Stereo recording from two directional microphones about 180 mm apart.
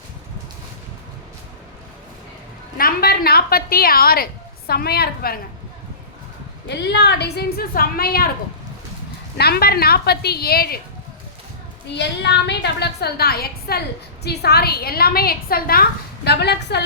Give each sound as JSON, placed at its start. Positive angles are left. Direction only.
{"t": 2.7, "sound": "a woman's voice", "side_deg": 55}
{"t": 6.7, "sound": "a woman's voice", "side_deg": 70}
{"t": 9.4, "sound": "a woman's voice", "side_deg": 60}
{"t": 11.9, "sound": "a woman's voice", "side_deg": 70}